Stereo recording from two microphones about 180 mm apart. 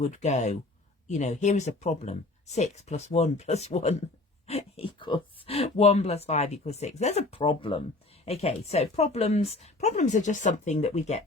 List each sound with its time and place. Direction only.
0.1 s speech: 40° left (ahead or behind)